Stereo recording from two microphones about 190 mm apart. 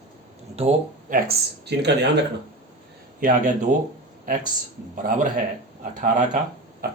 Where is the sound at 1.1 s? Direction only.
55° right (ahead or behind).